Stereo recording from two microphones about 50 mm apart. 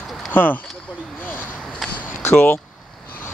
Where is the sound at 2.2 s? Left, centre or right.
Left.